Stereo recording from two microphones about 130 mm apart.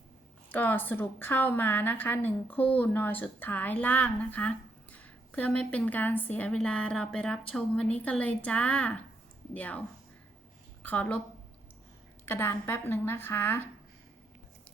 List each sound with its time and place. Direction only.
0.5 s a woman's voice: 15° left (ahead or behind)
10.8 s a woman's voice: 10° left (ahead or behind)
12.2 s a woman's voice: 15° left (ahead or behind)